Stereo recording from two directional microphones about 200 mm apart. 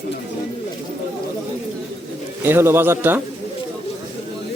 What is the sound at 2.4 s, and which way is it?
Speech, 10° right (ahead or behind).